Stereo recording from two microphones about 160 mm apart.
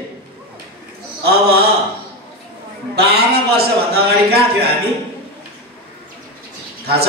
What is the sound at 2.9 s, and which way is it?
A man's voice, 80° right.